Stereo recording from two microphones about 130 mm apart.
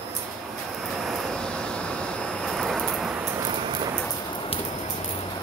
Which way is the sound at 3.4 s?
40° right (ahead or behind).